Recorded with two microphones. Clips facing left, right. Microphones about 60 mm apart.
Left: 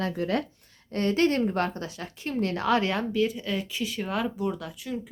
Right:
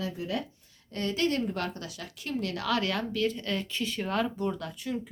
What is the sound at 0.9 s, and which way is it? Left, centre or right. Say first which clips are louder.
A woman's voice: left 5 dB; left.